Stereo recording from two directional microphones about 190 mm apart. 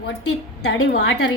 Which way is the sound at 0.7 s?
70° left (ahead or behind).